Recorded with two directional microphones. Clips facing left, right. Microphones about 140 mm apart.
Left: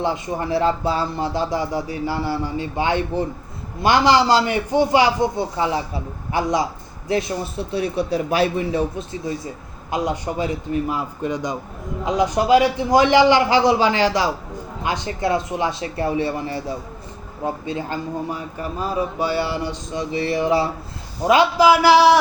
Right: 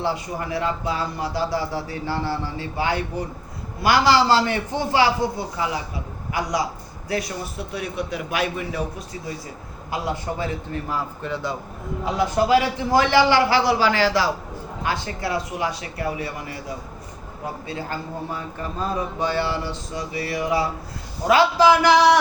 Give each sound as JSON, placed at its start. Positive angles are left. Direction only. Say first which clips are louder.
{"t": 0.0, "sound": "a man's voice", "louder": "left 3 dB", "side_deg": 25}
{"t": 21.2, "sound": "a man's voice", "louder": "left 2 dB", "side_deg": 15}